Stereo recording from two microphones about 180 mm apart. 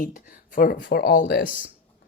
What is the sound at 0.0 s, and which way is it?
Speech, 50° left (ahead or behind).